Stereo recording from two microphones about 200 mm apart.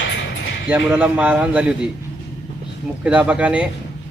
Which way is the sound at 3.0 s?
5° right (ahead or behind).